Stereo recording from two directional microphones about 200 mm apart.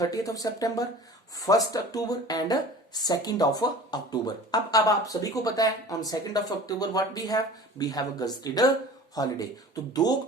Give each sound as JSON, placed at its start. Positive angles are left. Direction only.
{"t": 0.0, "sound": "a woman's voice", "side_deg": 15}